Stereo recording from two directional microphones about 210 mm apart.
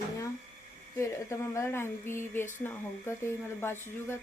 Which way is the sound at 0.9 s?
15° left (ahead or behind).